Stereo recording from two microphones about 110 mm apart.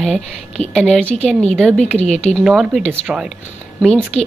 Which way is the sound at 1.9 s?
85° left.